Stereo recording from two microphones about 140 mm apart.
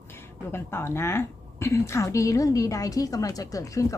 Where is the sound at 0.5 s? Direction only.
15° left (ahead or behind).